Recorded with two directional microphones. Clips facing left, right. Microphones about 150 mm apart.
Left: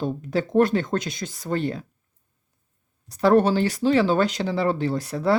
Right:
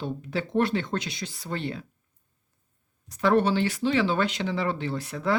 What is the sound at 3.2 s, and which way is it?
Speech, 40° left (ahead or behind).